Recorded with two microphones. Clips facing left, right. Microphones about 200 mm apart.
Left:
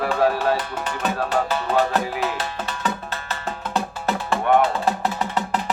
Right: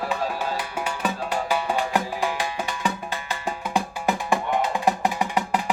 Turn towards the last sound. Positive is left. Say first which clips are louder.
# even
turn(degrees=-10)  # may be behind; listen again after turning